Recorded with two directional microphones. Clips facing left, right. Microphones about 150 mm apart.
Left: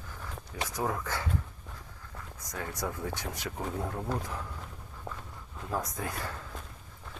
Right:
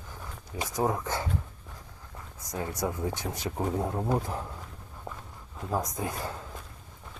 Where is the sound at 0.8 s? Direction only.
20° right (ahead or behind).